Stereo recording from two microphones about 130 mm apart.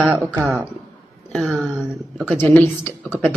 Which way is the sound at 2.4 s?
15° left (ahead or behind).